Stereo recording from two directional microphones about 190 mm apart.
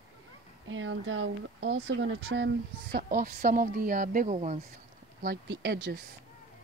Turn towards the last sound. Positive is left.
turn(degrees=-60)  # may be behind; listen again after turning